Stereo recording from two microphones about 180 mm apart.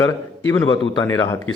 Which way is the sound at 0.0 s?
15° left (ahead or behind).